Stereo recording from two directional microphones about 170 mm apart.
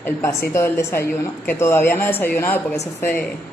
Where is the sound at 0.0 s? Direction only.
15° left (ahead or behind).